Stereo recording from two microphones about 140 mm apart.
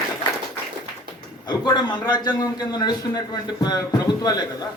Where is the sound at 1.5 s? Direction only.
30° left (ahead or behind).